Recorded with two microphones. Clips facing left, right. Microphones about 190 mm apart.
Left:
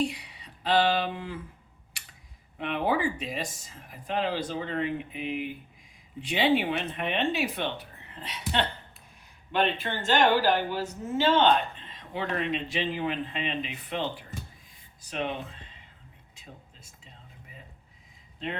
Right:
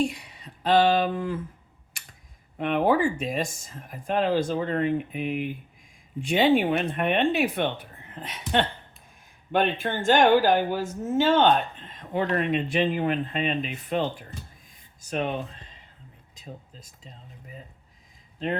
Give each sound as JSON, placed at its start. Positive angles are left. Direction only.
{"t": 0.0, "sound": "speech", "side_deg": -45}
{"t": 2.6, "sound": "speech", "side_deg": -50}